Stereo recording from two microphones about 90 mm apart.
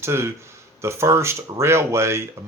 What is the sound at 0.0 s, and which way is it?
Speech, 30° right (ahead or behind).